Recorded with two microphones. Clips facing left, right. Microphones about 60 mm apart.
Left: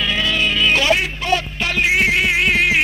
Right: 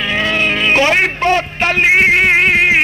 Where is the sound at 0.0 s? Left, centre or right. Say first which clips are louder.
Right 3 dB; right.